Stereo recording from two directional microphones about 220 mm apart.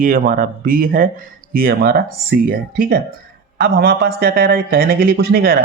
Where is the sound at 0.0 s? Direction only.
40° right (ahead or behind).